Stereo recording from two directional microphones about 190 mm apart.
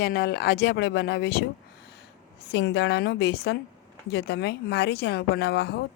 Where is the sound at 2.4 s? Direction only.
60° left (ahead or behind).